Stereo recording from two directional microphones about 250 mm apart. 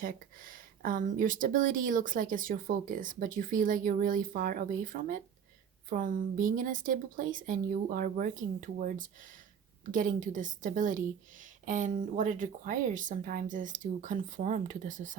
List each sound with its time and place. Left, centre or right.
0.0 s speech: right